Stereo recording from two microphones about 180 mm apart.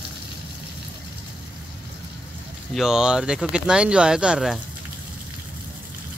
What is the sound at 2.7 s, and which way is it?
Speech, 5° right (ahead or behind).